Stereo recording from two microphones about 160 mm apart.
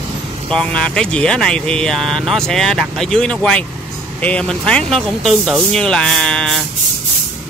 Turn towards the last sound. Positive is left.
turn(degrees=5)  # may be behind; listen again after turning